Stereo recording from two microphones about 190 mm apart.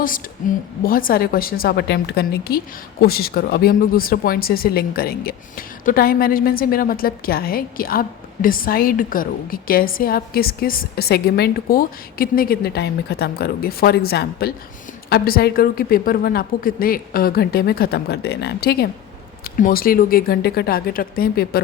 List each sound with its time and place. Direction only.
0.9 s speech: 50° left (ahead or behind)